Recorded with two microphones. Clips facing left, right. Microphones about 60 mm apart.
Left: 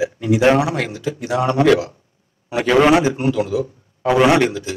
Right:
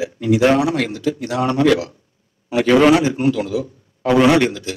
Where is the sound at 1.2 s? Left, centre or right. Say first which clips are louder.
Left 2 dB; left.